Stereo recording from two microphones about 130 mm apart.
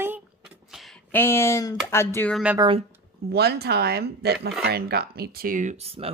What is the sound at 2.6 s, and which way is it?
Speech, 30° right (ahead or behind).